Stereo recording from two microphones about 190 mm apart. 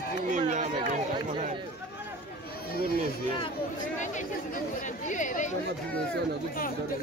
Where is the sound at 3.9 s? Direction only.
40° left (ahead or behind).